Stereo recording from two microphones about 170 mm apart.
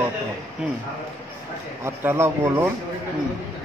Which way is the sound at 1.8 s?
15° right (ahead or behind).